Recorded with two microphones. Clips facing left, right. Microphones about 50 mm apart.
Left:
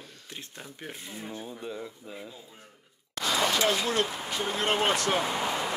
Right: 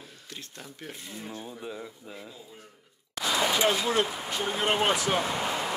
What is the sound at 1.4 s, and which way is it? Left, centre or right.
Speech, centre.